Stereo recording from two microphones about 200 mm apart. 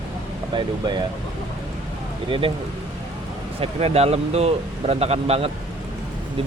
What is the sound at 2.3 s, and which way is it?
Speech, 25° right (ahead or behind).